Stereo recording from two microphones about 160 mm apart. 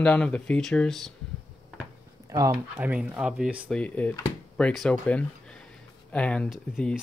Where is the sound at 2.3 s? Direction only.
20° right (ahead or behind).